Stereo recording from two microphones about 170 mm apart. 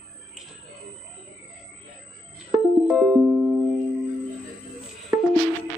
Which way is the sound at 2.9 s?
10° right (ahead or behind).